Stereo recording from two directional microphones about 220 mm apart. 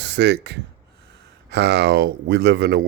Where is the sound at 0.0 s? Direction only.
50° right (ahead or behind).